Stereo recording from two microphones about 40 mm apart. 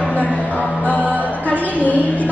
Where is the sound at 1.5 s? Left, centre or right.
Left.